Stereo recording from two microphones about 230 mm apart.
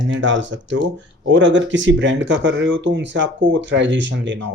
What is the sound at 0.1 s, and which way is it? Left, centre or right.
Speech, right.